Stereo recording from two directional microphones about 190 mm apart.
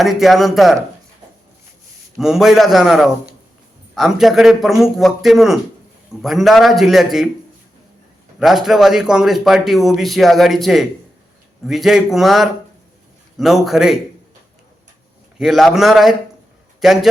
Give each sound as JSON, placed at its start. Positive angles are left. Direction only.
{"t": 0.0, "sound": "speech", "side_deg": 0}
{"t": 2.1, "sound": "speech", "side_deg": 0}
{"t": 8.4, "sound": "speech", "side_deg": 0}
{"t": 15.4, "sound": "speech", "side_deg": 0}